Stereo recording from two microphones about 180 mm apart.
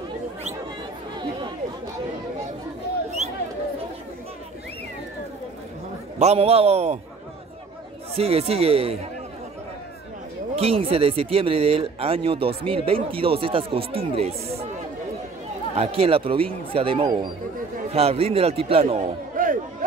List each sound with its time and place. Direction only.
6.1 s speech: 35° right (ahead or behind)
8.2 s speech: 35° right (ahead or behind)
10.5 s speech: 35° right (ahead or behind)
15.7 s speech: 35° right (ahead or behind)
19.3 s chatter: 50° right (ahead or behind)